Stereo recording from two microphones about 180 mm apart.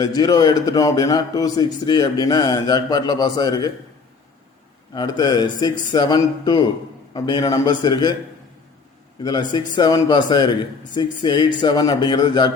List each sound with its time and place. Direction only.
0.0 s a man's voice: 20° left (ahead or behind)
4.9 s a man's voice: 20° left (ahead or behind)
9.2 s a man's voice: 25° left (ahead or behind)